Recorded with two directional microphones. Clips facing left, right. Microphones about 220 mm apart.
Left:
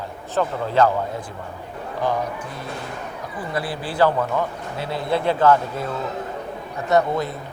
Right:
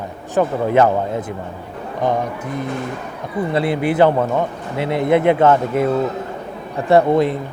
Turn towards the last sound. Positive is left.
turn(degrees=-25)  # may be behind; listen again after turning